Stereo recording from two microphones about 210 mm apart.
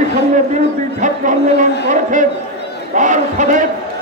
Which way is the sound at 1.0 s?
35° right (ahead or behind).